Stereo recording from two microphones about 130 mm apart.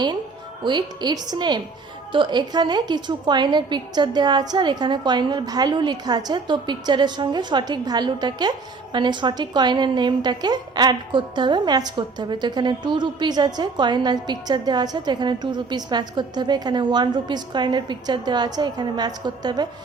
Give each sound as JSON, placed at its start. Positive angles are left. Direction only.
{"t": 0.6, "sound": "a woman's voice", "side_deg": -35}